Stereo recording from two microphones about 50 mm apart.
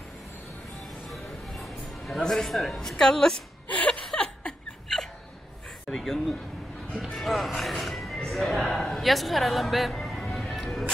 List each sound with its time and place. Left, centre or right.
1.1 s a sound: centre
2.2 s a woman's voice: centre
3.6 s chuckle: left
4.2 s laughter: centre
5.9 s a sound: centre
7.2 s speech: centre
8.6 s speech: centre
10.3 s music: centre